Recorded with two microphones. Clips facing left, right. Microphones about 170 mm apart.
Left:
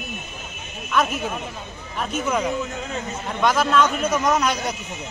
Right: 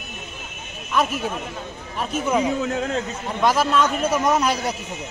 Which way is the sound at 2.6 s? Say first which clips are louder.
Right 7 dB; 65° right (ahead or behind).